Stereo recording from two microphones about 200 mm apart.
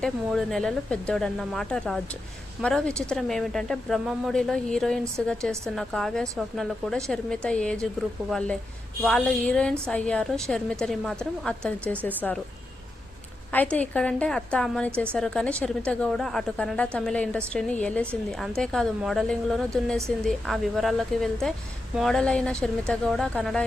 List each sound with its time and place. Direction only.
0.0 s a woman's voice: centre (ahead or behind)
13.5 s a woman's voice: 10° left (ahead or behind)